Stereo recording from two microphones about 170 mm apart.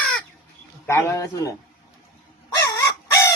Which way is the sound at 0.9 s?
15° left (ahead or behind).